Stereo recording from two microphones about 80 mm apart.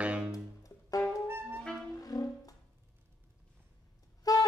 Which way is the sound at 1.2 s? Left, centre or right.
Right.